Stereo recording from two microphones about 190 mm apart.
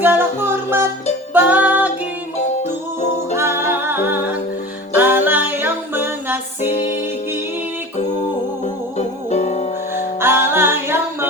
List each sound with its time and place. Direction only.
0.0 s music: 10° right (ahead or behind)
2.6 s music: 35° left (ahead or behind)
3.3 s music: 10° right (ahead or behind)
8.6 s music: 35° left (ahead or behind)
9.9 s music: 10° right (ahead or behind)